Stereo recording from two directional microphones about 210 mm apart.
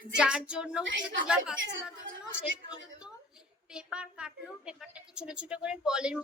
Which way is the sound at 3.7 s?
5° right (ahead or behind).